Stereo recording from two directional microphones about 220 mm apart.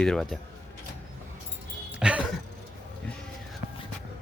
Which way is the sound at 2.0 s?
5° right (ahead or behind).